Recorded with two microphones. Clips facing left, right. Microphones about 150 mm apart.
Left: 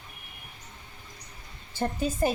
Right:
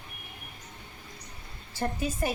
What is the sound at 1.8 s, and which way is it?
Speech, 25° left (ahead or behind).